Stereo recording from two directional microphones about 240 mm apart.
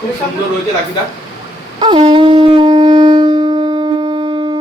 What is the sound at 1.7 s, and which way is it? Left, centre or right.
Shofar, centre.